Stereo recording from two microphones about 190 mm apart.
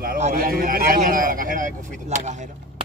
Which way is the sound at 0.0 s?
45° right (ahead or behind).